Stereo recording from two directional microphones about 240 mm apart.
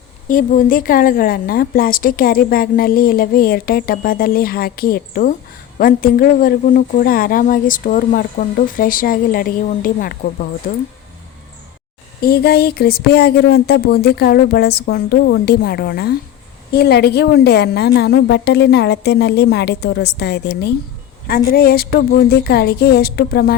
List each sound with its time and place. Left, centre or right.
0.3 s a woman's voice: left
12.2 s a woman's voice: left